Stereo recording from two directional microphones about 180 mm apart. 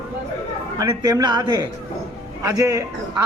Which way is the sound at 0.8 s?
20° right (ahead or behind).